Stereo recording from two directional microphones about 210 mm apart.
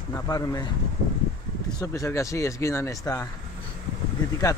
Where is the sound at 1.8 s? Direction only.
15° left (ahead or behind).